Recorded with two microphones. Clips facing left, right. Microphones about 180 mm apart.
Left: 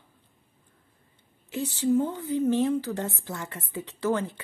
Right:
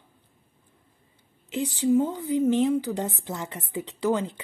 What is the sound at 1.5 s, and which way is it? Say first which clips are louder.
A woman's voice: right 2 dB; 15° right (ahead or behind).